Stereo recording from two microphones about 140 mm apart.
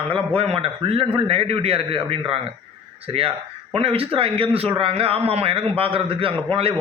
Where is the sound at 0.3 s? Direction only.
45° right (ahead or behind).